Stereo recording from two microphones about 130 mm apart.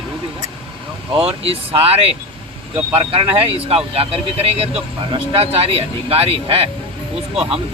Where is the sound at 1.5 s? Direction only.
50° right (ahead or behind).